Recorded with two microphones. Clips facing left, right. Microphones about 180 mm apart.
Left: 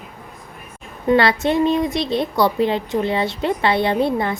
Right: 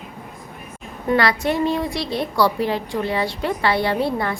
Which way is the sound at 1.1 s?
25° left (ahead or behind).